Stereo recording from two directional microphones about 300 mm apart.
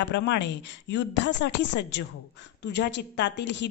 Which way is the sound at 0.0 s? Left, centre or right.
Left.